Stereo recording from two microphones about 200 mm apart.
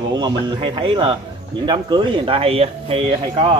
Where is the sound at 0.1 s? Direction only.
20° right (ahead or behind).